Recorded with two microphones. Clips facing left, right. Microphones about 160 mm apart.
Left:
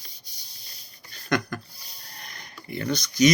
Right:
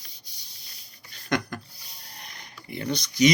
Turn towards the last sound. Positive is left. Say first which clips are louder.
# left 1 dB
turn(degrees=-25)  # may be behind; listen again after turning